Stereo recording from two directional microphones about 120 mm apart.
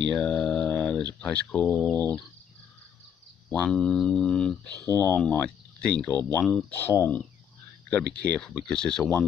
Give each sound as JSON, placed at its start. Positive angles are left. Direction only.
{"t": 0.1, "sound": "a sound", "side_deg": 5}
{"t": 3.4, "sound": "speech", "side_deg": 10}
{"t": 4.6, "sound": "speech", "side_deg": -30}
{"t": 5.0, "sound": "speech", "side_deg": 15}
{"t": 6.7, "sound": "speech", "side_deg": 20}